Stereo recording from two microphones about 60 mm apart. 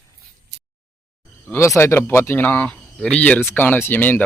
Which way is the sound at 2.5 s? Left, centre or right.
Left.